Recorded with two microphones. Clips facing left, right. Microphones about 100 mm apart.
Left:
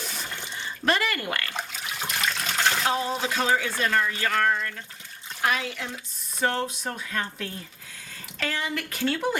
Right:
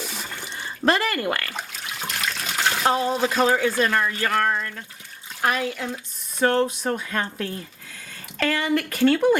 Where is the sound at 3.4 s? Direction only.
45° right (ahead or behind).